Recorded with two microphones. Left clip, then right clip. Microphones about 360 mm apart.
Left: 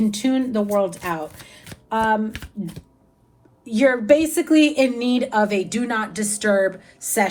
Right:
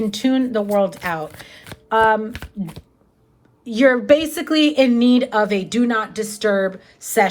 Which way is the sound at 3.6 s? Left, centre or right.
Centre.